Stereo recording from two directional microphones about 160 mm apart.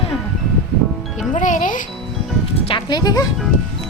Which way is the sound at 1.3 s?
50° left (ahead or behind).